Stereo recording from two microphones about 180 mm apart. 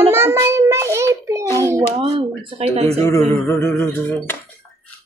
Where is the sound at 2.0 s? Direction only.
30° right (ahead or behind).